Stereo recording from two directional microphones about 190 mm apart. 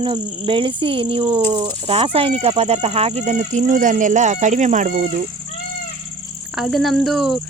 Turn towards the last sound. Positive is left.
turn(degrees=0)  # may be behind; listen again after turning